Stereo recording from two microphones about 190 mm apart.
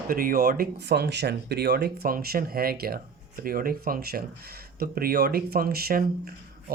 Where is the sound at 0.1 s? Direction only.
50° right (ahead or behind).